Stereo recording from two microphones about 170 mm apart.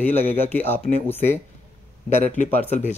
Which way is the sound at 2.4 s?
40° left (ahead or behind).